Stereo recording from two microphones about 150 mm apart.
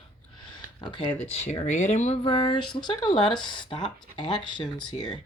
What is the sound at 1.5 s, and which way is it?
Speech, 55° left (ahead or behind).